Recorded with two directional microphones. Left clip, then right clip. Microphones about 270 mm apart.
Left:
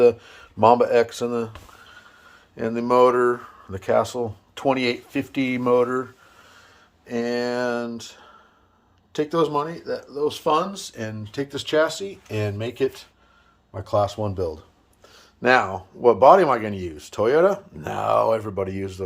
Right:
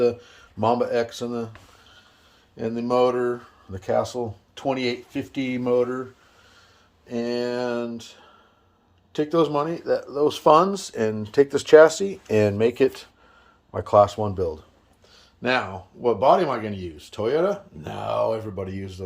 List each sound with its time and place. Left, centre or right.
0.0 s speech: centre
2.6 s speech: centre
7.1 s speech: centre
15.1 s a sound: centre
15.7 s speech: centre